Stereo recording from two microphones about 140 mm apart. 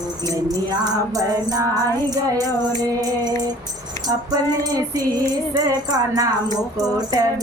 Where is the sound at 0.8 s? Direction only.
25° right (ahead or behind).